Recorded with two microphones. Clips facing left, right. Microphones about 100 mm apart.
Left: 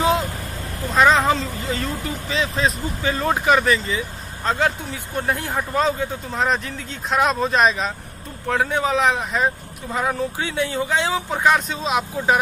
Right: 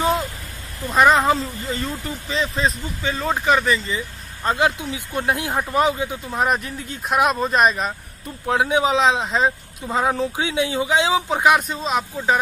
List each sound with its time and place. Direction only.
0.9 s speech: 5° right (ahead or behind)
4.5 s speech: 15° right (ahead or behind)
8.5 s speech: 15° right (ahead or behind)
11.7 s speech: centre (ahead or behind)